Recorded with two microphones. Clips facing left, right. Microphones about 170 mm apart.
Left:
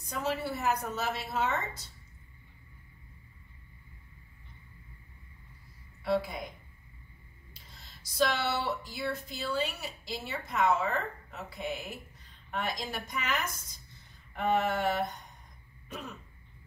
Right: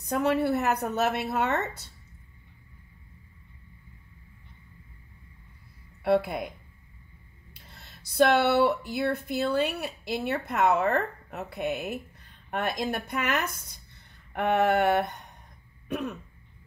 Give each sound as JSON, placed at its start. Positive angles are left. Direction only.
{"t": 0.0, "sound": "speech", "side_deg": -60}
{"t": 6.0, "sound": "speech", "side_deg": -60}
{"t": 7.5, "sound": "speech", "side_deg": -60}
{"t": 14.3, "sound": "a sound", "side_deg": -65}
{"t": 15.9, "sound": "speech", "side_deg": -65}